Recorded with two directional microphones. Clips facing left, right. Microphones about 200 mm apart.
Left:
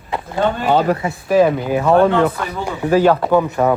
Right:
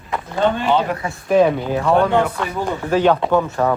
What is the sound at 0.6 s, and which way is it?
Speech, 40° left (ahead or behind).